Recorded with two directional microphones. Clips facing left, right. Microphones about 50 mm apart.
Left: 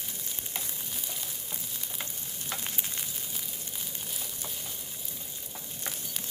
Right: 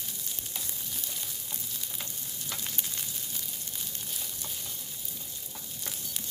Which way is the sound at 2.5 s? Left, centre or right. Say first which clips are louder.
Left 2 dB; left.